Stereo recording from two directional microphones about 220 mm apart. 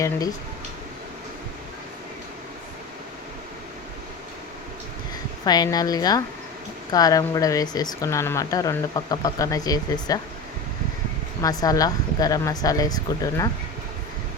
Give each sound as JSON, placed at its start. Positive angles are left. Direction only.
{"t": 5.5, "sound": "speech", "side_deg": 20}
{"t": 11.4, "sound": "speech", "side_deg": 15}